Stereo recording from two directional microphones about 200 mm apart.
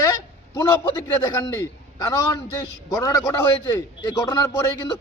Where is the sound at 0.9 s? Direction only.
20° left (ahead or behind).